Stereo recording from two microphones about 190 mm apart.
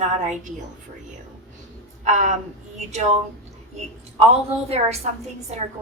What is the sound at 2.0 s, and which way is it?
Speech, 35° right (ahead or behind).